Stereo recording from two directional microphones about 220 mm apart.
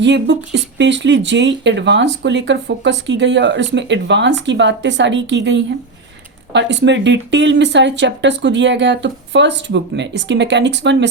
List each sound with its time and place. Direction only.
0.0 s speech: 50° right (ahead or behind)